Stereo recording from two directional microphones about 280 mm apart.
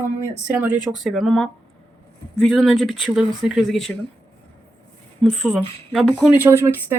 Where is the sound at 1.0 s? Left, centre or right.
Centre.